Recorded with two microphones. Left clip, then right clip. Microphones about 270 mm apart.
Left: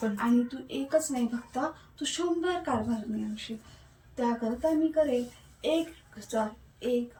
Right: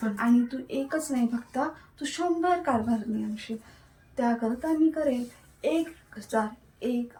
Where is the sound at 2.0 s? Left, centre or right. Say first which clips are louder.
Right 3 dB; centre.